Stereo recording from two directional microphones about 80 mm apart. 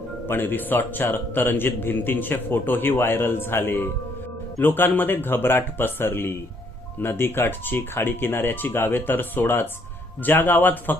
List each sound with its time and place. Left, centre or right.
0.3 s a man's voice: left